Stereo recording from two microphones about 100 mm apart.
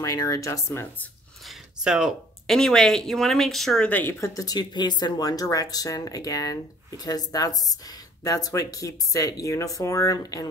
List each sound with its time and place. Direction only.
0.0 s speech: 35° left (ahead or behind)
1.9 s speech: 5° right (ahead or behind)
3.9 s speech: 20° left (ahead or behind)